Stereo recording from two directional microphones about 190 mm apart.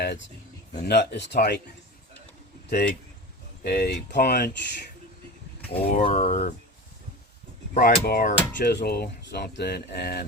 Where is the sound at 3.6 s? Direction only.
55° left (ahead or behind).